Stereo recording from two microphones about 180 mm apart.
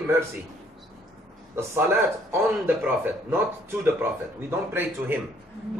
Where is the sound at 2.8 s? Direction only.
10° right (ahead or behind).